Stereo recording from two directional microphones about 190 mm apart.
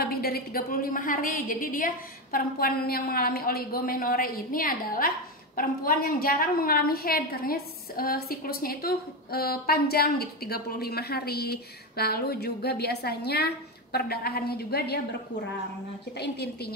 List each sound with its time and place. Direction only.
0.0 s a woman's voice: 55° left (ahead or behind)
16.2 s a woman's voice: 60° left (ahead or behind)